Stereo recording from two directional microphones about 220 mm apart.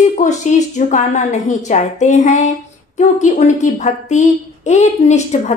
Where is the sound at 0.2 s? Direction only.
35° left (ahead or behind).